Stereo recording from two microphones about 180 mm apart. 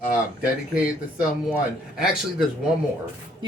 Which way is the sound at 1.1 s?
5° right (ahead or behind).